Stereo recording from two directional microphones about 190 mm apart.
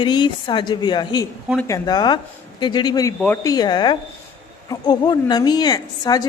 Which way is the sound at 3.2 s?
10° left (ahead or behind).